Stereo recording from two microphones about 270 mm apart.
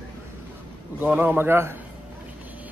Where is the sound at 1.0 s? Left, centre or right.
Centre.